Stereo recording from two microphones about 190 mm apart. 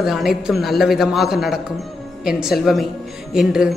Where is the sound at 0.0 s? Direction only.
Centre (ahead or behind).